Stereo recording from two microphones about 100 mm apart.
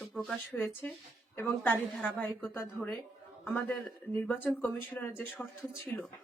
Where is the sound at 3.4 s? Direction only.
20° left (ahead or behind).